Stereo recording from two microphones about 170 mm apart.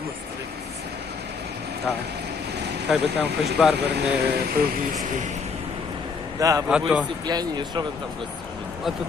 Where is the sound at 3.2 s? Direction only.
75° right (ahead or behind).